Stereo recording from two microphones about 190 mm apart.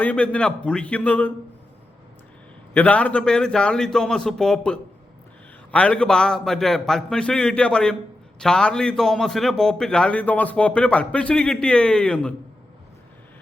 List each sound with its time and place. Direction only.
0.0 s a man's voice: 5° left (ahead or behind)
2.7 s a man's voice: 5° left (ahead or behind)